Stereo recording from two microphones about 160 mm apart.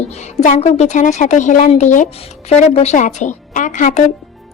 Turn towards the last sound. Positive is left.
turn(degrees=50)  # may be behind; listen again after turning